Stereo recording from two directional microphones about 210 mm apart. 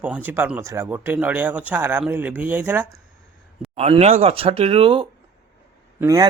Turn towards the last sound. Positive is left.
turn(degrees=-15)  # may be behind; listen again after turning